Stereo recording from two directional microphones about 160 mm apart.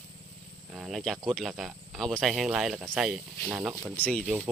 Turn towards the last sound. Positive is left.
turn(degrees=-10)  # may be behind; listen again after turning